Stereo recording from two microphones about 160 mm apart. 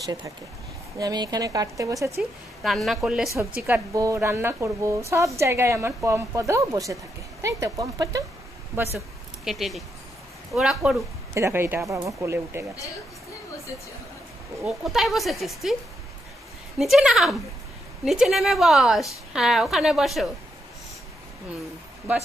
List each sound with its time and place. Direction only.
0.9 s speech: 25° right (ahead or behind)
2.6 s speech: centre (ahead or behind)
3.6 s a woman's voice: 15° right (ahead or behind)
8.9 s speech: centre (ahead or behind)
11.3 s a woman's voice: 15° right (ahead or behind)
14.6 s speech: centre (ahead or behind)
16.7 s speech: centre (ahead or behind)